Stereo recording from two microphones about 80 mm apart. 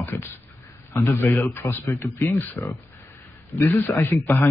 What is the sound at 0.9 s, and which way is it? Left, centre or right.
Speech, left.